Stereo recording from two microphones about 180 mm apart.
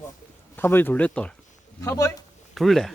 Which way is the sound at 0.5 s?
10° left (ahead or behind).